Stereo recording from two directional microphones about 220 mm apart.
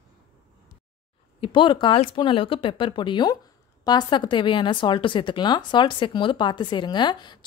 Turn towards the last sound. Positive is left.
turn(degrees=20)  # may be behind; listen again after turning